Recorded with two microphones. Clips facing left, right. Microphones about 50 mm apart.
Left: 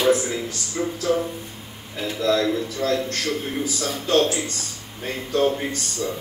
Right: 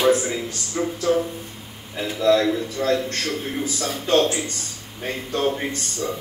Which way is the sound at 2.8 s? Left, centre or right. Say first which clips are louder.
Right 2 dB; right.